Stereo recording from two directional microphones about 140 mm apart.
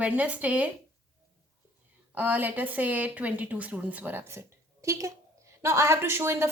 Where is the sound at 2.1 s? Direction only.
10° right (ahead or behind).